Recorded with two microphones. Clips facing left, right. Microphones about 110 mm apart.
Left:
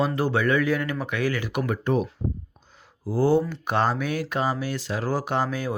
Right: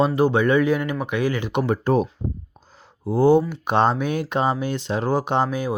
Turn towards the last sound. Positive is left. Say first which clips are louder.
# right 4 dB
turn(degrees=-15)  # may be behind; listen again after turning